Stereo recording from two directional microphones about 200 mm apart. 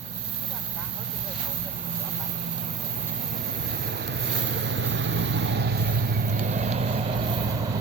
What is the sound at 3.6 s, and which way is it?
Vehicle, 55° right (ahead or behind).